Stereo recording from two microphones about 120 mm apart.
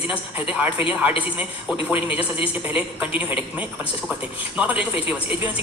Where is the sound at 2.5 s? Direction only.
15° right (ahead or behind).